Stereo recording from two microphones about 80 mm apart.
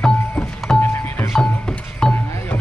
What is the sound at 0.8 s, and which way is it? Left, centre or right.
Music, left.